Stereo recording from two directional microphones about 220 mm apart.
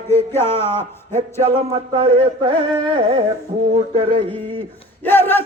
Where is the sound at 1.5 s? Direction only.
25° right (ahead or behind).